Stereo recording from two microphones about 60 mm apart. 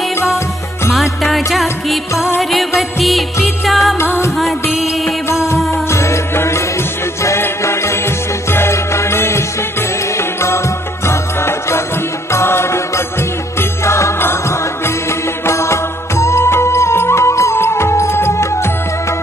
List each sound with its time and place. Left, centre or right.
0.9 s music: centre
5.9 s music: left